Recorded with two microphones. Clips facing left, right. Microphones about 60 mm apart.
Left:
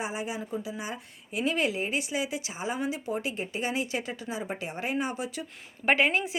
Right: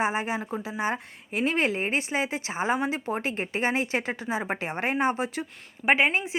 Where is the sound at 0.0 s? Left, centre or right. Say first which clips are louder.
Right 6 dB; right.